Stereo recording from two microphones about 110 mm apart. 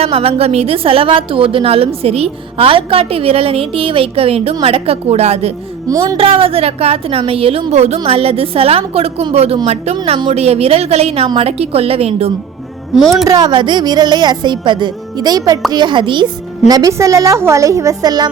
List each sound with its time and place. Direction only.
0.0 s a woman's voice: 60° right (ahead or behind)
5.9 s speech: 30° right (ahead or behind)
6.1 s a woman's voice: 55° right (ahead or behind)
7.7 s a woman's voice: 75° right (ahead or behind)
13.0 s speech: centre (ahead or behind)
13.2 s speech: 35° right (ahead or behind)